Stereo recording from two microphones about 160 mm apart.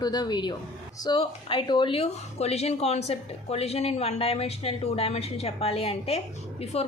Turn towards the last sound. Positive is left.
turn(degrees=40)  # may be behind; listen again after turning